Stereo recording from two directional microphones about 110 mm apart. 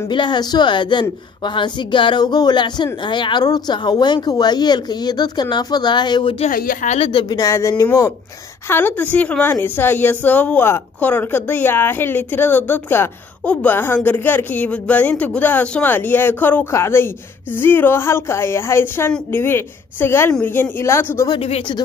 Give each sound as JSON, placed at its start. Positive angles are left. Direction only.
{"t": 0.1, "sound": "a woman's voice", "side_deg": 45}
{"t": 6.4, "sound": "speech", "side_deg": 90}
{"t": 7.1, "sound": "a woman's voice", "side_deg": 50}
{"t": 7.3, "sound": "a woman's voice", "side_deg": 30}
{"t": 8.6, "sound": "a woman's voice", "side_deg": 20}
{"t": 21.4, "sound": "speech", "side_deg": 65}